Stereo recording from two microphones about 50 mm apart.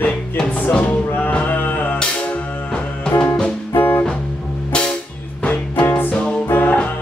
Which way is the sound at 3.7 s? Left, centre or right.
Left.